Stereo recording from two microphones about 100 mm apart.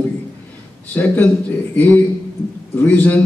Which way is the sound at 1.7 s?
20° left (ahead or behind).